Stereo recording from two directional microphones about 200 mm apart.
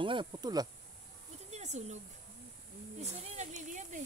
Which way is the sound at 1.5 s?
35° right (ahead or behind).